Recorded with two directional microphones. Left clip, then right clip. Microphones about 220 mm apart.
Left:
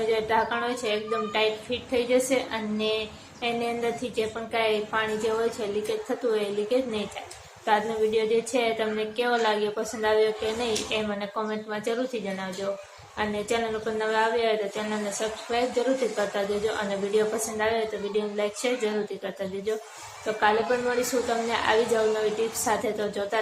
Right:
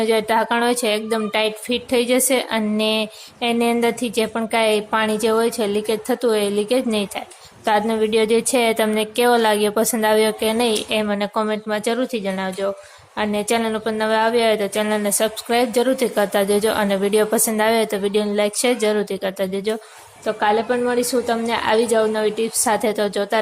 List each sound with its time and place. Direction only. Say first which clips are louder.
0.1 s a woman's voice: right 5 dB; 50° right (ahead or behind)
21.2 s a woman's voice: right 5 dB; 45° right (ahead or behind)